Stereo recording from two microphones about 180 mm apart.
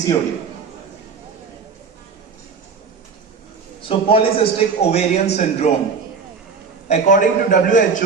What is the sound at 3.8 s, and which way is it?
Speech, 30° left (ahead or behind).